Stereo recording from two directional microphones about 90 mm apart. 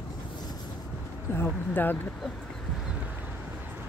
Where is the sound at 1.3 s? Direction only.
20° left (ahead or behind).